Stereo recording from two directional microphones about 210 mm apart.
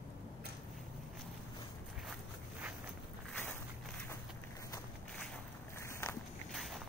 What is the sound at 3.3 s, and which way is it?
Walk, 5° left (ahead or behind).